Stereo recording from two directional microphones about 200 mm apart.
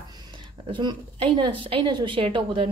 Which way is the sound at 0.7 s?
25° right (ahead or behind).